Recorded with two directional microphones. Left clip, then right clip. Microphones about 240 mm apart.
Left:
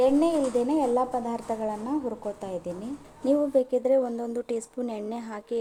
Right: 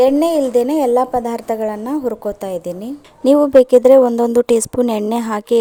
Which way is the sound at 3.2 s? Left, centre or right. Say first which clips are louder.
Right 14 dB; right.